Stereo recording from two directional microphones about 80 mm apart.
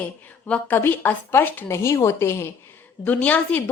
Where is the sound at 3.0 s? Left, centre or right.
Centre.